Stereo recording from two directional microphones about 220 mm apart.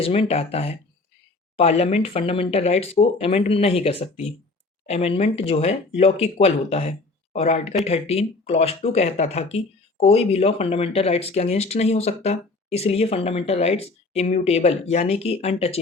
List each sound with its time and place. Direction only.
0.0 s speech: 25° left (ahead or behind)